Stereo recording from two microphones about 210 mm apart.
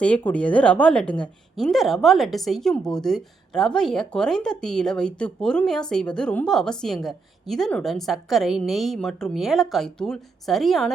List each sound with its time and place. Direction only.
0.0 s a woman's voice: 5° left (ahead or behind)